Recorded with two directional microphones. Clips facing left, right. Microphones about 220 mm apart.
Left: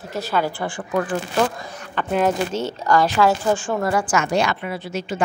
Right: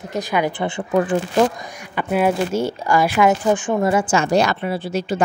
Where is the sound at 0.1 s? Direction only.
15° right (ahead or behind).